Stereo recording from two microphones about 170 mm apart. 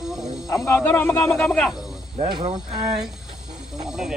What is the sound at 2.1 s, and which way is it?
Speech, 40° right (ahead or behind).